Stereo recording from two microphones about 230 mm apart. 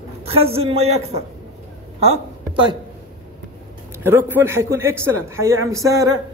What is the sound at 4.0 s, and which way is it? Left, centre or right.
A man's voice, centre.